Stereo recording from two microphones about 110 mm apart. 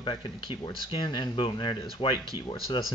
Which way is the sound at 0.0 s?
45° left (ahead or behind).